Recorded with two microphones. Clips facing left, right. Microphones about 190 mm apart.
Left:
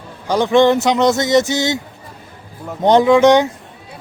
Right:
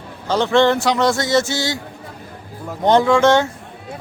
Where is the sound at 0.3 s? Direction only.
15° left (ahead or behind).